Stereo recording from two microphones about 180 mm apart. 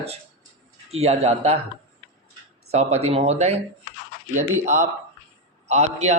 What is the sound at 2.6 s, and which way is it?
Speech, 35° right (ahead or behind).